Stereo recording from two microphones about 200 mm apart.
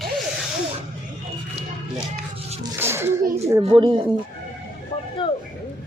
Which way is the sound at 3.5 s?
20° right (ahead or behind).